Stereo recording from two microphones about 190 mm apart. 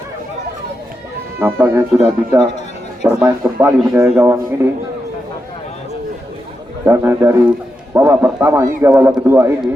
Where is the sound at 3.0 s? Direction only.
10° right (ahead or behind).